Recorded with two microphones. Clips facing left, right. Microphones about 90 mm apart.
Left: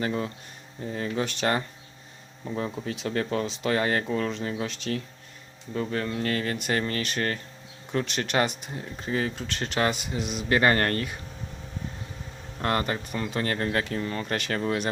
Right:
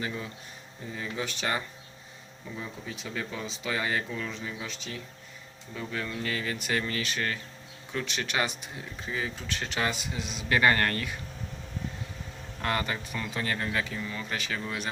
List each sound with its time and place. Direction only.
0.0 s speech: 50° left (ahead or behind)
2.8 s speech: 75° left (ahead or behind)
3.1 s speech: 55° left (ahead or behind)
3.7 s speech: 50° left (ahead or behind); by 5.0 s 65° left (ahead or behind)
5.7 s speech: 40° left (ahead or behind)
10.5 s speech: 35° left (ahead or behind)
12.6 s speech: 40° left (ahead or behind); by 14.6 s 55° left (ahead or behind)